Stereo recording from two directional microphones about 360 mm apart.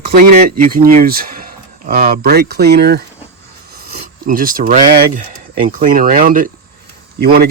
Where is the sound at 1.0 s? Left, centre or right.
Right.